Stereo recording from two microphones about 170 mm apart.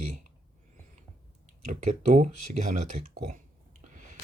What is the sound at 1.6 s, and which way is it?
Speech, 45° right (ahead or behind).